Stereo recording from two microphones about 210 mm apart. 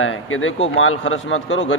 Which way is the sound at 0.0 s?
75° left (ahead or behind).